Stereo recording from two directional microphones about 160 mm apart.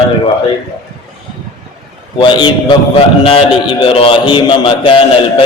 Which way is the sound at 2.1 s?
30° left (ahead or behind).